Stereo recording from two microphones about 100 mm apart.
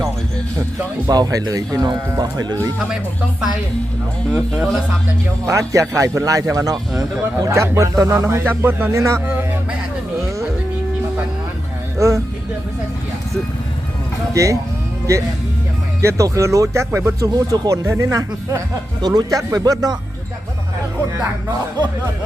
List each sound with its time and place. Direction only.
1.0 s speech: 40° right (ahead or behind)
5.5 s speech: 30° right (ahead or behind)
9.2 s a sound: 15° right (ahead or behind)
11.9 s speech: 30° right (ahead or behind)
14.3 s speech: 30° right (ahead or behind)